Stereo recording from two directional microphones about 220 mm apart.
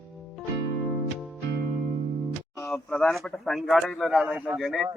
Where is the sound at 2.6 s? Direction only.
5° left (ahead or behind).